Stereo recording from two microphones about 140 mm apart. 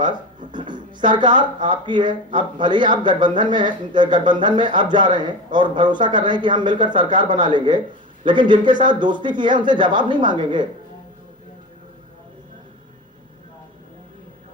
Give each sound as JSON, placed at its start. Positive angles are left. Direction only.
{"t": 0.5, "sound": "speech", "side_deg": -35}